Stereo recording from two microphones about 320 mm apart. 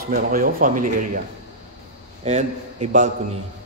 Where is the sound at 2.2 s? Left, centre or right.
Right.